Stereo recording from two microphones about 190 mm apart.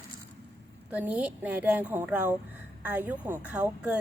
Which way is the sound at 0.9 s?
10° right (ahead or behind).